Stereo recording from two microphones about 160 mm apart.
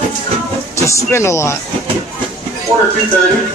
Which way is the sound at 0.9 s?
15° left (ahead or behind).